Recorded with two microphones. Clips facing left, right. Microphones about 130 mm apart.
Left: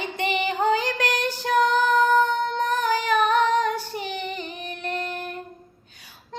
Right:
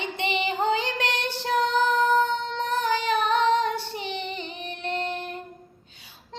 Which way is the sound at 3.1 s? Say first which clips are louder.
Left 4 dB; 45° left (ahead or behind).